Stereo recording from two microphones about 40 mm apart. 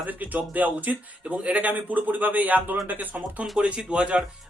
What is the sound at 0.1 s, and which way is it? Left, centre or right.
A man's voice, right.